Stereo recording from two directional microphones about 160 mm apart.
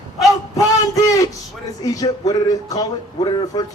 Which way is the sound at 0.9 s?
20° left (ahead or behind).